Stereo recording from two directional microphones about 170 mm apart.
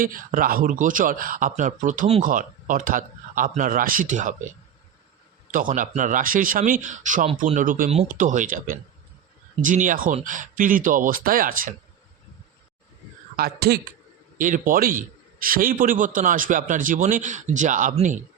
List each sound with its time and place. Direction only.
0.0 s a man's voice: 55° right (ahead or behind)
5.5 s a man's voice: 50° right (ahead or behind)
13.3 s a man's voice: 65° right (ahead or behind)
14.3 s a man's voice: 50° right (ahead or behind)